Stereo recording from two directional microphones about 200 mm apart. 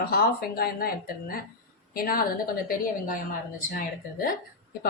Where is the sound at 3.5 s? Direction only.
45° left (ahead or behind).